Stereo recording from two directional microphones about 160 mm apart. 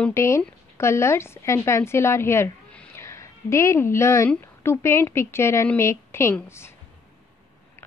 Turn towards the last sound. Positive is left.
turn(degrees=15)  # may be behind; listen again after turning